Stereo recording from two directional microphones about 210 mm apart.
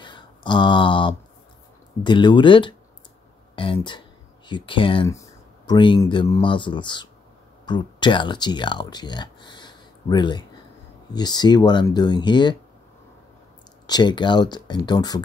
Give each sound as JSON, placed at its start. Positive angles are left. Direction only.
{"t": 0.0, "sound": "a sound", "side_deg": 20}
{"t": 2.0, "sound": "speech", "side_deg": 20}
{"t": 13.8, "sound": "speech", "side_deg": 20}